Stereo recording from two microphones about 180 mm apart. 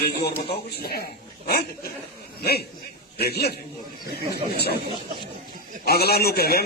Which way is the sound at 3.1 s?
60° left (ahead or behind).